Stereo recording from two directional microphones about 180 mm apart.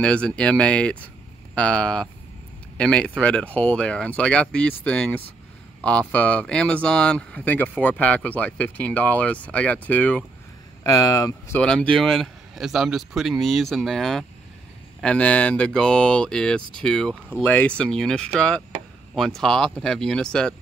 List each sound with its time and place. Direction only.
0.0 s speech: 5° left (ahead or behind)
11.6 s speech: 5° left (ahead or behind)